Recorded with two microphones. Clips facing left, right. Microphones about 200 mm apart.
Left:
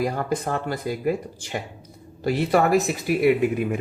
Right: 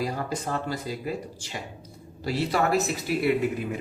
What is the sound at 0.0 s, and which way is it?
A man's voice, 55° left (ahead or behind).